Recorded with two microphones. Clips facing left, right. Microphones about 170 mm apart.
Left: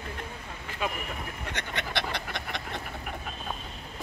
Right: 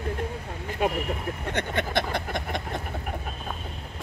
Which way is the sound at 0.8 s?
55° right (ahead or behind).